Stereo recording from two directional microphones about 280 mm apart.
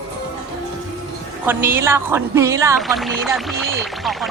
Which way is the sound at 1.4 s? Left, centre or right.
Centre.